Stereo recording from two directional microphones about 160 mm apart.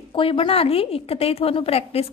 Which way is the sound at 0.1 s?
35° left (ahead or behind).